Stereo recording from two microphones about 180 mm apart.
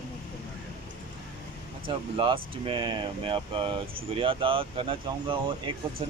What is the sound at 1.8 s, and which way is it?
Speech, 30° right (ahead or behind).